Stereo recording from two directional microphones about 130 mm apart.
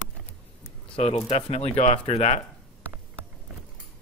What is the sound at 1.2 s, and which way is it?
Speech, 50° left (ahead or behind).